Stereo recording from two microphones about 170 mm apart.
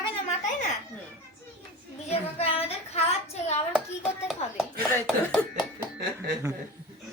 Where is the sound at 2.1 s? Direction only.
35° left (ahead or behind).